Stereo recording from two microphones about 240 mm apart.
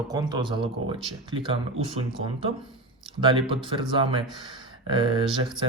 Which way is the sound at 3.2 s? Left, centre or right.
Right.